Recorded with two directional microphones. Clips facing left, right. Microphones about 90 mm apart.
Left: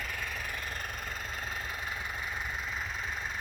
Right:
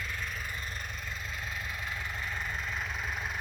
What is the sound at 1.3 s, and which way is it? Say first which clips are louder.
Vehicle: left 1 dB; 40° left (ahead or behind).